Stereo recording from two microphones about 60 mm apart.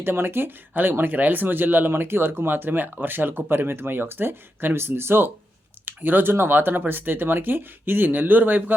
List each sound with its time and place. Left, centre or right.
0.0 s speech: right